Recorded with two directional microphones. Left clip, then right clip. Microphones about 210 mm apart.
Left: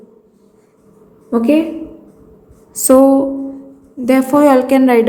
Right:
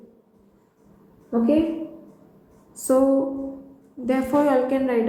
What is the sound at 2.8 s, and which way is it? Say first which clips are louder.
A woman's voice: left 10 dB; 35° left (ahead or behind).